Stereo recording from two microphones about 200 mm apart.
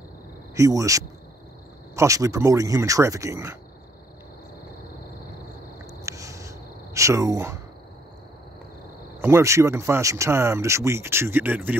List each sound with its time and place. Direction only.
0.6 s speech: 15° right (ahead or behind)
6.0 s a sound: 15° right (ahead or behind)
9.2 s speech: 15° right (ahead or behind)